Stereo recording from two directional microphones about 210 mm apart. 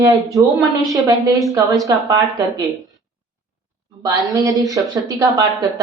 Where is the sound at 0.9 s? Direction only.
15° right (ahead or behind).